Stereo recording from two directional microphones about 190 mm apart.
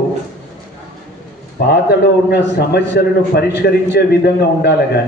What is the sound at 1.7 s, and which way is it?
A man's voice, 60° left (ahead or behind).